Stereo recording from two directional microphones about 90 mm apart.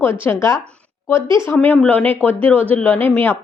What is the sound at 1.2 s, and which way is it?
Speech, 55° right (ahead or behind).